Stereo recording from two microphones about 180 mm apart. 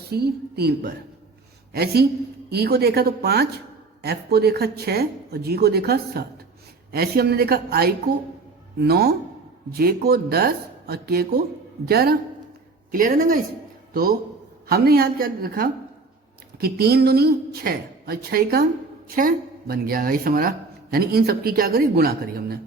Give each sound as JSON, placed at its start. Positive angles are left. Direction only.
{"t": 0.1, "sound": "speech", "side_deg": -60}
{"t": 12.9, "sound": "speech", "side_deg": -50}
{"t": 14.7, "sound": "speech", "side_deg": -60}